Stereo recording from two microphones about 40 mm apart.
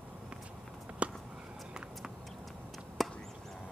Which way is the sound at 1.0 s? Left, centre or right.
Right.